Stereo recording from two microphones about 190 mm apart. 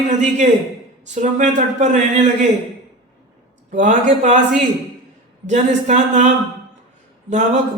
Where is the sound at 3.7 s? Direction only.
40° right (ahead or behind).